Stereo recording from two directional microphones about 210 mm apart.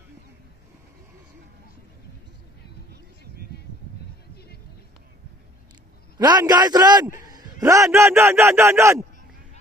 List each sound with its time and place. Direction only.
6.1 s a man's voice: 20° right (ahead or behind)